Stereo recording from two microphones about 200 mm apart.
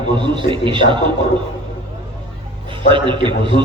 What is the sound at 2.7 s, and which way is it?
Speech, 25° right (ahead or behind).